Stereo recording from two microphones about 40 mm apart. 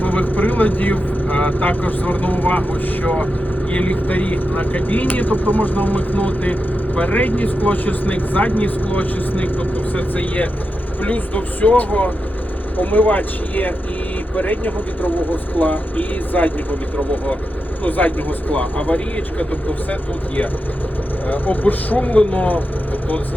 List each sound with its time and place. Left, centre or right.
0.0 s speech: left
17.8 s speech: left